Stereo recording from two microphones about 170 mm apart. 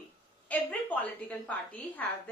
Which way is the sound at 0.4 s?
10° left (ahead or behind).